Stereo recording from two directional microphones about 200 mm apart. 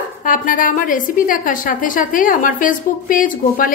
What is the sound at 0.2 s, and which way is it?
A woman's voice, 40° left (ahead or behind).